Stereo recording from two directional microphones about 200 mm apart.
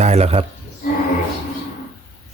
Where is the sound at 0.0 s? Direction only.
30° right (ahead or behind).